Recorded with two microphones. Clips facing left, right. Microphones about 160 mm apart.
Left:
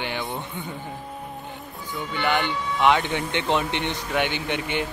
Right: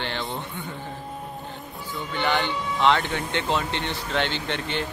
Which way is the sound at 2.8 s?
15° left (ahead or behind).